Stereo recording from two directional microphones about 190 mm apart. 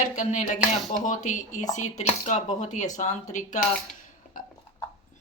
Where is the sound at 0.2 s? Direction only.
40° left (ahead or behind).